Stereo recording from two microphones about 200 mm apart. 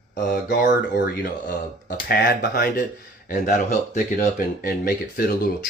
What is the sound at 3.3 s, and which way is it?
Speech, 40° left (ahead or behind).